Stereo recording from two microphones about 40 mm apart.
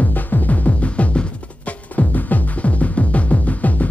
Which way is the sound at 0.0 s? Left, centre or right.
Left.